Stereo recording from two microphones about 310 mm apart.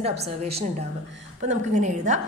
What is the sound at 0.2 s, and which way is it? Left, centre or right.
A woman's voice, centre.